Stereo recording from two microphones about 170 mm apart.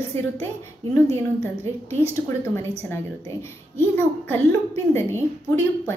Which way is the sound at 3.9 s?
10° left (ahead or behind).